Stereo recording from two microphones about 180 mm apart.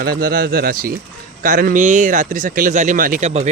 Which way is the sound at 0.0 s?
55° right (ahead or behind).